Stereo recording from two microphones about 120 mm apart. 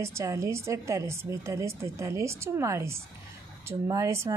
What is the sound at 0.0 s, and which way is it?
A woman's voice, 25° right (ahead or behind).